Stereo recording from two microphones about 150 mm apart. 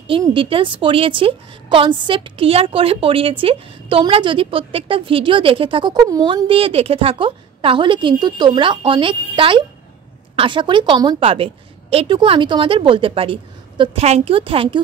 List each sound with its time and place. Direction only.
0.3 s a woman's voice: 35° right (ahead or behind)